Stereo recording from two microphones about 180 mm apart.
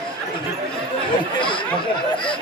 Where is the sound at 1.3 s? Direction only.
25° left (ahead or behind).